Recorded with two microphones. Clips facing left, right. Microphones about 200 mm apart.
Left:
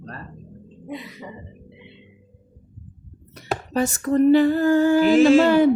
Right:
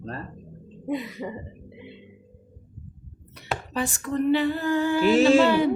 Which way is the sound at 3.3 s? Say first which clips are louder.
Left 6 dB; 45° left (ahead or behind).